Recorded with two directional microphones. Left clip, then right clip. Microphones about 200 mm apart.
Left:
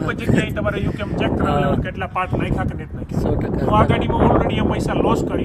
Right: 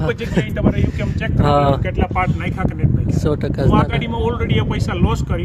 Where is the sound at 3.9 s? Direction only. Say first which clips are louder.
Left 4 dB; 10° right (ahead or behind).